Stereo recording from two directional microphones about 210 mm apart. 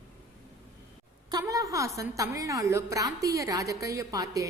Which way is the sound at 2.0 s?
15° right (ahead or behind).